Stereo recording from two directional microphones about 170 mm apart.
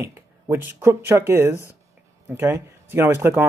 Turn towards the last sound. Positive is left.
turn(degrees=-10)  # may be behind; listen again after turning